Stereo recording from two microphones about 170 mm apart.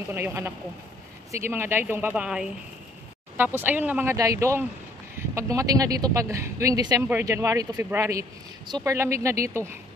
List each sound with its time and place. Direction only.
0.1 s speech: 15° right (ahead or behind)